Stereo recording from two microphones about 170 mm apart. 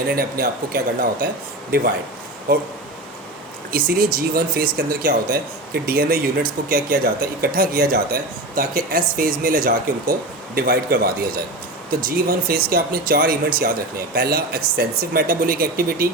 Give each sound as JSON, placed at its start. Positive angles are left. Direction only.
{"t": 0.1, "sound": "speech", "side_deg": -65}
{"t": 3.7, "sound": "speech", "side_deg": -60}